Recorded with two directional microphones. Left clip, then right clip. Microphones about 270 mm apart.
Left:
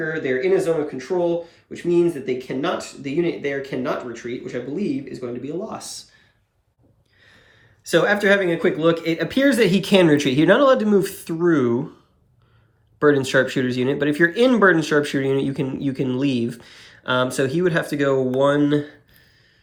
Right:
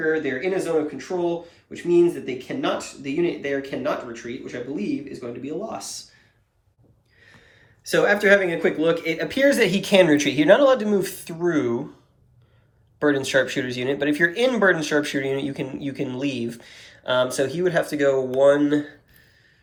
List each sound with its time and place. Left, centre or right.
0.0 s speech: centre
7.9 s speech: centre
13.0 s speech: centre